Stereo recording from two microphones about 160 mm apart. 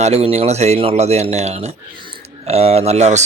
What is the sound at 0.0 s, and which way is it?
Speech, 40° right (ahead or behind).